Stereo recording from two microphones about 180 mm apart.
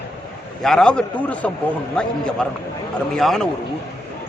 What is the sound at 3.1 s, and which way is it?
Speech, 5° left (ahead or behind).